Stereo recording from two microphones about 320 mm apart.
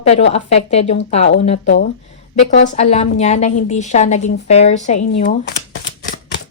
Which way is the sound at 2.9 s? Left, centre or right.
Left.